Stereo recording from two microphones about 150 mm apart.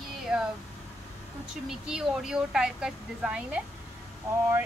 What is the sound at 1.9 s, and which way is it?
A woman's voice, 5° right (ahead or behind).